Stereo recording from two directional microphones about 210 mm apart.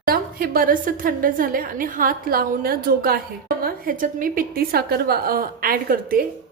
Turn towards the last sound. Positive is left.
turn(degrees=-45)  # may be behind; listen again after turning